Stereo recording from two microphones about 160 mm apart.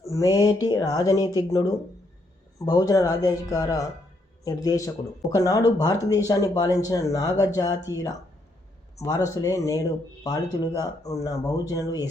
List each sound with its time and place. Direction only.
0.1 s speech: 20° left (ahead or behind)
2.6 s speech: 25° left (ahead or behind)